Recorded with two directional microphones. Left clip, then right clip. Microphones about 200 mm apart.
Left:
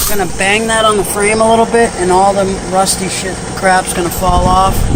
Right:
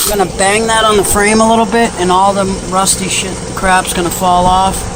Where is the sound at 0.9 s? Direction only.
15° right (ahead or behind).